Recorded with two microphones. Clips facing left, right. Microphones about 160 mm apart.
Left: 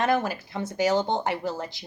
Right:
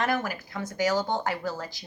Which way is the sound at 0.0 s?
25° left (ahead or behind).